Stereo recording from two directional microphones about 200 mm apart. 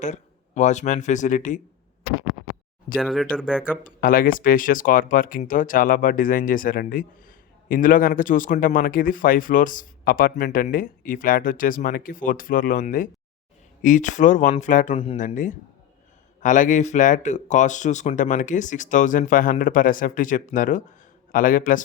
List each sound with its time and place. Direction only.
0.0 s speech: 35° left (ahead or behind)
3.0 s speech: centre (ahead or behind)
3.8 s speech: 45° left (ahead or behind)